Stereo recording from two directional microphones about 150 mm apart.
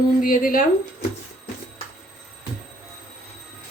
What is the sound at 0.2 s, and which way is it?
Speech, 65° left (ahead or behind).